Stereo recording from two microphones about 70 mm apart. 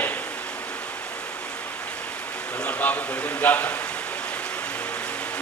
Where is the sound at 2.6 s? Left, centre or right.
Left.